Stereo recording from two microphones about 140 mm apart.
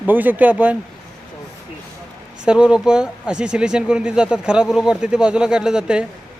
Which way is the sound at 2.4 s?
5° right (ahead or behind).